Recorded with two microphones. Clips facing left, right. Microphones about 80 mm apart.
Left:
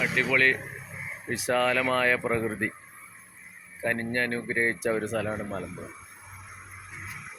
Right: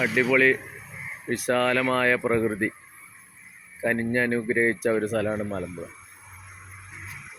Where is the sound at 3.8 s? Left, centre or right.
Centre.